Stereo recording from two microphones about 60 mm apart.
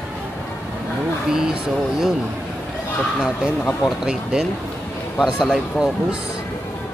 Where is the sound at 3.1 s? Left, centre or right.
Centre.